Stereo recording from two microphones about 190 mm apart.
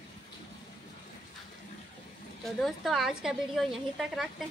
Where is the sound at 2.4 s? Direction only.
Centre (ahead or behind).